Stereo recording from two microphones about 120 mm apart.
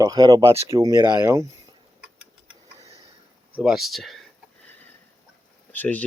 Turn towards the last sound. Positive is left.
turn(degrees=15)  # may be behind; listen again after turning